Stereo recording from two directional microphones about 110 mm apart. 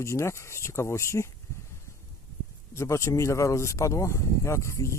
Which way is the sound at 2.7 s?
25° left (ahead or behind).